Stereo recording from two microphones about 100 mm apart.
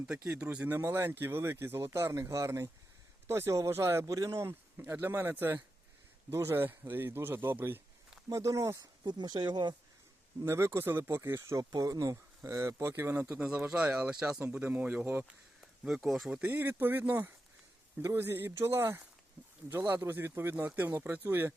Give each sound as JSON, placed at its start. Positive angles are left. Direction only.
{"t": 0.4, "sound": "speech", "side_deg": -20}
{"t": 9.0, "sound": "speech", "side_deg": -45}
{"t": 10.4, "sound": "speech", "side_deg": -25}
{"t": 13.7, "sound": "speech", "side_deg": -15}
{"t": 16.0, "sound": "speech", "side_deg": 0}
{"t": 16.3, "sound": "speech", "side_deg": -20}